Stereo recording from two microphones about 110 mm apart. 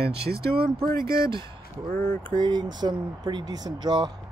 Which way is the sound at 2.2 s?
45° right (ahead or behind).